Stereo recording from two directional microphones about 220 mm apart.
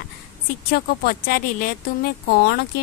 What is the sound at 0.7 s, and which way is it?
Speech, 40° left (ahead or behind).